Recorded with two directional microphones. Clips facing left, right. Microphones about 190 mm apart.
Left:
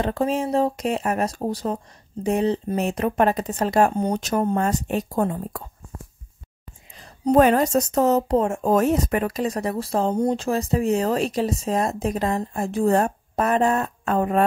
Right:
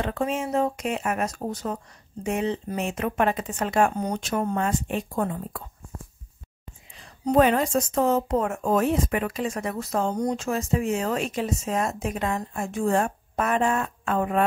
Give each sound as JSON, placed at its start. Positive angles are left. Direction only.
{"t": 0.0, "sound": "speech", "side_deg": 35}
{"t": 7.0, "sound": "speech", "side_deg": 40}